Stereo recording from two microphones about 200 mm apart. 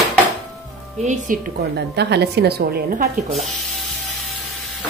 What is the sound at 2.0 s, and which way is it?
A woman's voice, 55° right (ahead or behind).